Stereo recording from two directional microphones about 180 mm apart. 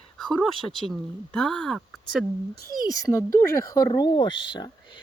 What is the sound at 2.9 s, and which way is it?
Speech, 15° left (ahead or behind).